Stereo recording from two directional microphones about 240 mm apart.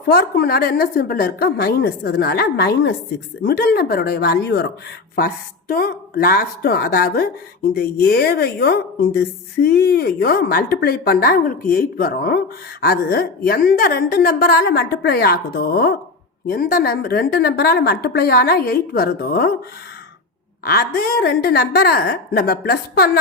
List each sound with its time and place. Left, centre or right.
0.1 s a woman's voice: left
20.7 s a woman's voice: left